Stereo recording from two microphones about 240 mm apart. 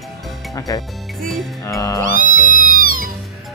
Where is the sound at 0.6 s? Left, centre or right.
Centre.